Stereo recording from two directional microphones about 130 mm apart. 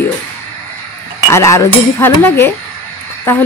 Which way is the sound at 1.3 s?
20° left (ahead or behind).